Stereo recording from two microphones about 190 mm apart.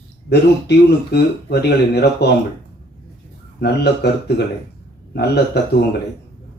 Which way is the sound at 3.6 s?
60° left (ahead or behind).